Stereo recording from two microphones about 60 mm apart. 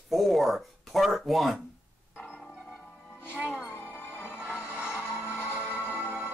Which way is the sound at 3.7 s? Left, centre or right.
Left.